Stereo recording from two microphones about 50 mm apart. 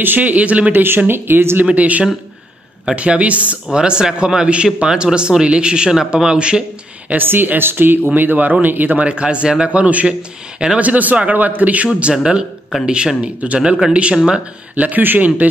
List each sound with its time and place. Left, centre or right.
0.0 s a man's voice: right
0.8 s speech: right
1.7 s a man's voice: right
7.2 s a man's voice: right
14.1 s speech: centre
14.8 s a man's voice: right